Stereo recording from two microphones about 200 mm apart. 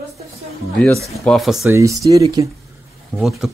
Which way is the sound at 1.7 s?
15° right (ahead or behind).